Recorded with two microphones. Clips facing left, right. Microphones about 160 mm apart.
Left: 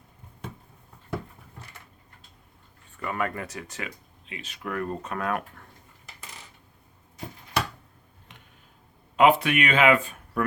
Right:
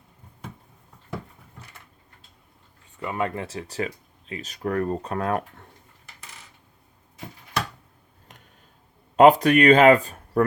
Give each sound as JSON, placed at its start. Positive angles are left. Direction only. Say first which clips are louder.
{"t": 3.0, "sound": "speech", "louder": "right 2 dB", "side_deg": -20}
{"t": 8.3, "sound": "a sound", "louder": "right 1 dB", "side_deg": -45}
{"t": 9.1, "sound": "speech", "louder": "right 5 dB", "side_deg": -40}